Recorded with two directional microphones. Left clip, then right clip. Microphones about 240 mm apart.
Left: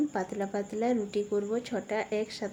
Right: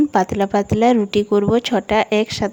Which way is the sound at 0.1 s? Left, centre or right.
Right.